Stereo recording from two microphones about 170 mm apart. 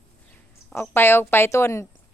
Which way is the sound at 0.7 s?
10° left (ahead or behind).